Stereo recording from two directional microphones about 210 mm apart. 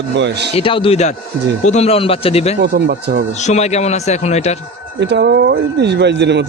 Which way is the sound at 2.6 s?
50° right (ahead or behind).